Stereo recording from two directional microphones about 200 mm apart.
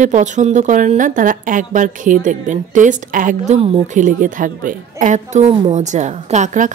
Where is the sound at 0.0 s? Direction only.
35° right (ahead or behind).